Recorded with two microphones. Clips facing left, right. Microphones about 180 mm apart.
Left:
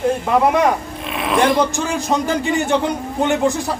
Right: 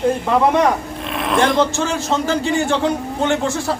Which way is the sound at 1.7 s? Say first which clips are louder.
Even; 15° left (ahead or behind).